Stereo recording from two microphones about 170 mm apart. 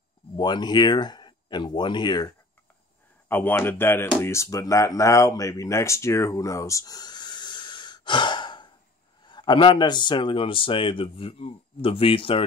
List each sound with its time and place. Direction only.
0.4 s speech: 25° left (ahead or behind)
3.3 s a man's voice: 10° left (ahead or behind); by 12.4 s 35° left (ahead or behind)